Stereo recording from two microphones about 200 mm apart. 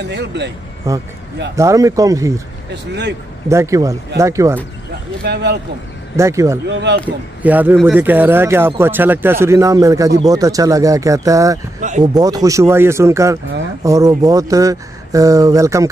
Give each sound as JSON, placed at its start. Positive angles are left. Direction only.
{"t": 0.1, "sound": "speech", "side_deg": -60}
{"t": 0.8, "sound": "speech", "side_deg": -15}
{"t": 2.7, "sound": "speech", "side_deg": -60}
{"t": 3.4, "sound": "speech", "side_deg": -15}
{"t": 5.2, "sound": "speech", "side_deg": -55}
{"t": 6.1, "sound": "speech", "side_deg": -15}
{"t": 6.7, "sound": "speech", "side_deg": -60}
{"t": 7.4, "sound": "speech", "side_deg": -10}